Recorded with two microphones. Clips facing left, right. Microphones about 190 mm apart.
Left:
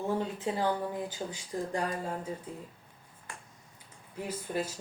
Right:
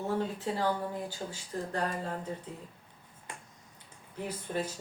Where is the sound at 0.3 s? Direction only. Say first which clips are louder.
Left 1 dB; 20° left (ahead or behind).